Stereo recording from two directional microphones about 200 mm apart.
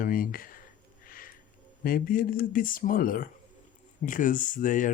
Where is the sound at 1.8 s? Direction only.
45° left (ahead or behind).